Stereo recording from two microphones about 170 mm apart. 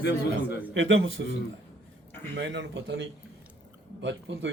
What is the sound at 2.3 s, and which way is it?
Speech, 90° right.